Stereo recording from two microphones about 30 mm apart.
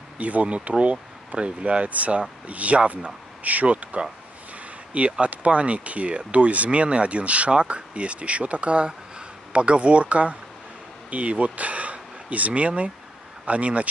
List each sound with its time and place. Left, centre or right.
0.2 s speech: right
1.9 s speech: right
5.2 s speech: right
11.5 s a sound: right
13.5 s speech: right